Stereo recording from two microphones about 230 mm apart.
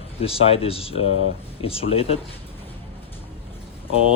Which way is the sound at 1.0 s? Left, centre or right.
Left.